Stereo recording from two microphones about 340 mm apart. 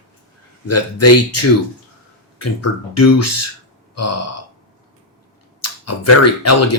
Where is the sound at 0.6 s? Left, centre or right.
Left.